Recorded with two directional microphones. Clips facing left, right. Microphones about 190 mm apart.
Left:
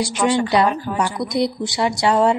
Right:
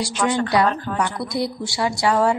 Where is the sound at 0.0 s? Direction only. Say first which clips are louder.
Left 3 dB; 20° left (ahead or behind).